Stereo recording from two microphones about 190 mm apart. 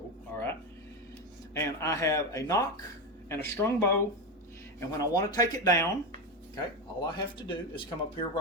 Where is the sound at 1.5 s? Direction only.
15° left (ahead or behind).